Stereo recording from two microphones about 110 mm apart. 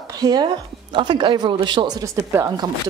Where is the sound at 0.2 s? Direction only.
35° right (ahead or behind).